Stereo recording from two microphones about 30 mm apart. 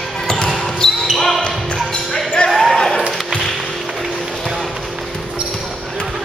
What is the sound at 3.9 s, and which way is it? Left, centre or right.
Music, centre.